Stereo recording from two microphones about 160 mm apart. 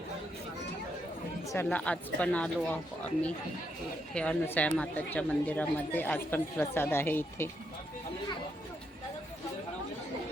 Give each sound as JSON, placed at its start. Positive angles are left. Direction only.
{"t": 1.5, "sound": "speech", "side_deg": 10}